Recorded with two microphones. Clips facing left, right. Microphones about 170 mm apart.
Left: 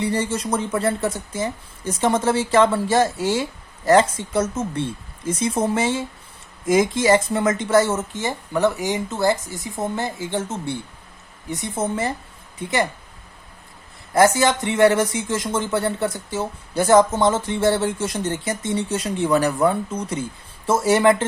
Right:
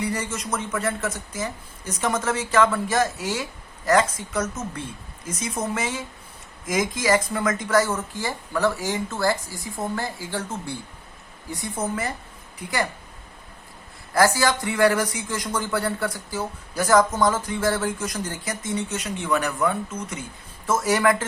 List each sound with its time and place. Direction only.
0.0 s speech: 30° left (ahead or behind)
14.1 s speech: 20° left (ahead or behind)